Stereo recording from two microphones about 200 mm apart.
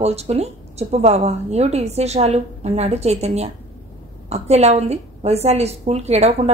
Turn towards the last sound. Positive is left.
turn(degrees=-35)  # may be behind; listen again after turning